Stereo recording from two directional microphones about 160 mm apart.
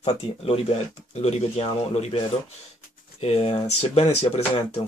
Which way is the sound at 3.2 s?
40° left (ahead or behind).